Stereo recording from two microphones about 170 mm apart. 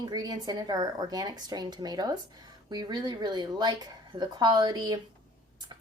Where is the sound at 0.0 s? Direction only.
25° right (ahead or behind).